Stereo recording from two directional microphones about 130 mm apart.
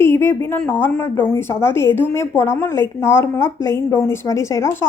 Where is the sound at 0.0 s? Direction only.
20° left (ahead or behind).